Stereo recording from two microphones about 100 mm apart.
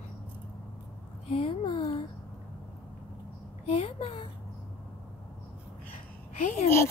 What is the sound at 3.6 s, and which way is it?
Speech, 75° left (ahead or behind).